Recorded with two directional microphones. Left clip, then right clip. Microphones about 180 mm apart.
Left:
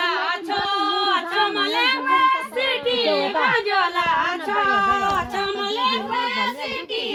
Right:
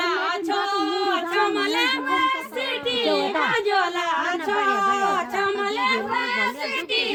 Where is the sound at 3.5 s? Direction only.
45° right (ahead or behind).